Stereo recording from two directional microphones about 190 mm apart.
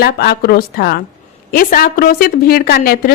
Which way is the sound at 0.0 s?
55° left (ahead or behind).